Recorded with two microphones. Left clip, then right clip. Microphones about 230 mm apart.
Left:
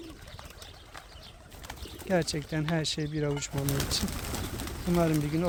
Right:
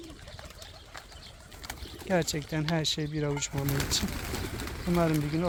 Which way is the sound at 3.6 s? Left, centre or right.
Left.